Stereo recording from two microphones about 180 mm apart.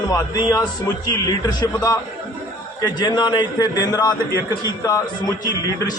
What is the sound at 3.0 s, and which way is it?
A man's voice, 25° left (ahead or behind).